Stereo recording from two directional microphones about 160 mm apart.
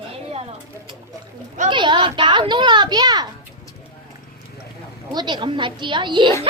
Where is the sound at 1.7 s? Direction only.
30° right (ahead or behind).